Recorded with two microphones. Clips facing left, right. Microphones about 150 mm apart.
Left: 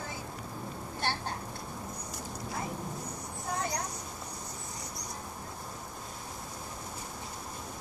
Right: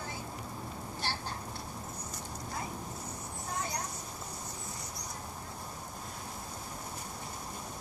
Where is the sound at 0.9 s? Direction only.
55° left (ahead or behind).